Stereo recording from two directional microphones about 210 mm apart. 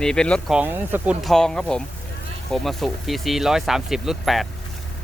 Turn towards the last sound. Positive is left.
turn(degrees=0)  # may be behind; listen again after turning